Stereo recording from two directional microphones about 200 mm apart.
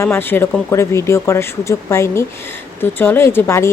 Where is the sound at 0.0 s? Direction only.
10° left (ahead or behind).